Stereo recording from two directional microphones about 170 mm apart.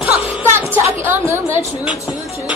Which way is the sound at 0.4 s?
15° right (ahead or behind).